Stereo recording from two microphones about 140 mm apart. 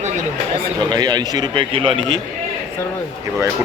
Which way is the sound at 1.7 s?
40° right (ahead or behind).